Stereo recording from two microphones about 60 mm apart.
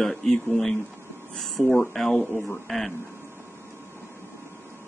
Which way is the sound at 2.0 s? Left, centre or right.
Centre.